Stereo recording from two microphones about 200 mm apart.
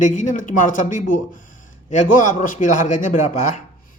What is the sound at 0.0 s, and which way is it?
Speech, 40° left (ahead or behind).